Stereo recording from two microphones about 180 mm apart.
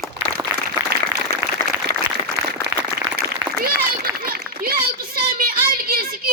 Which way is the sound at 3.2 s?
60° right (ahead or behind).